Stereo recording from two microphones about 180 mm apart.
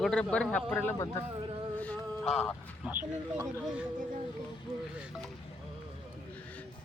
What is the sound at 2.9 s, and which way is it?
Speech, 10° right (ahead or behind).